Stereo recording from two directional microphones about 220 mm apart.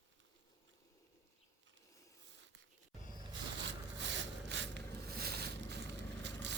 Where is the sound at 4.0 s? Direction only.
55° right (ahead or behind).